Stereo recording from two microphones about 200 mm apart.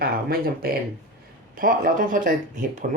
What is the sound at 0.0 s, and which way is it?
Speech, 50° right (ahead or behind).